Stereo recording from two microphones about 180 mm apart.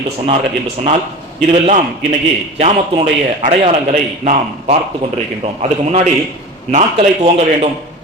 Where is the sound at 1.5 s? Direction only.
40° right (ahead or behind).